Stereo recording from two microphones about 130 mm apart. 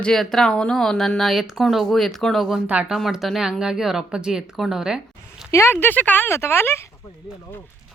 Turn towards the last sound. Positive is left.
turn(degrees=20)  # may be behind; listen again after turning